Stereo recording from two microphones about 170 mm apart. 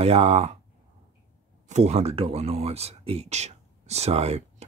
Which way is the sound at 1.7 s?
40° right (ahead or behind).